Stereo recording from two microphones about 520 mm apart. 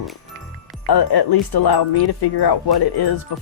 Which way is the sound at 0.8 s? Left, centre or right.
Left.